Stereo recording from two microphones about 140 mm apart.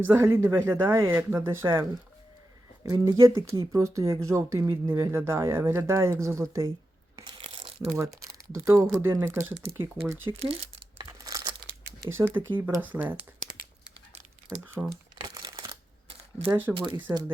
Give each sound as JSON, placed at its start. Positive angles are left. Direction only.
{"t": 0.0, "sound": "speech", "side_deg": -15}
{"t": 7.2, "sound": "a sound", "side_deg": -35}
{"t": 7.9, "sound": "speech", "side_deg": -20}
{"t": 10.4, "sound": "crumpling", "side_deg": -40}
{"t": 11.2, "sound": "crumpling", "side_deg": -25}
{"t": 11.9, "sound": "speech", "side_deg": -20}
{"t": 14.8, "sound": "speech", "side_deg": -10}
{"t": 15.2, "sound": "crumpling", "side_deg": -30}
{"t": 16.5, "sound": "speech", "side_deg": -15}
{"t": 16.7, "sound": "speech", "side_deg": -35}